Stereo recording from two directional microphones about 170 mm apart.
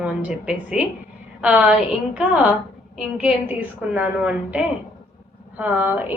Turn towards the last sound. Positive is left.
turn(degrees=-10)  # may be behind; listen again after turning